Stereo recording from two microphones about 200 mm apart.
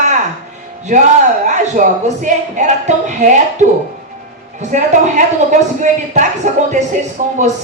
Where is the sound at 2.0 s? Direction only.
40° right (ahead or behind).